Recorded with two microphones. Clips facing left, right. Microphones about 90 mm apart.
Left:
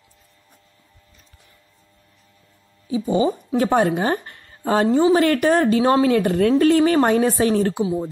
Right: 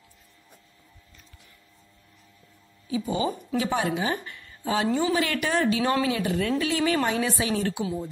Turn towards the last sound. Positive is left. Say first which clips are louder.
# left 8 dB
turn(degrees=40)  # may be behind; listen again after turning